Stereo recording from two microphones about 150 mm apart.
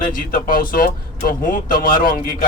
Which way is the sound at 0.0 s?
70° left (ahead or behind).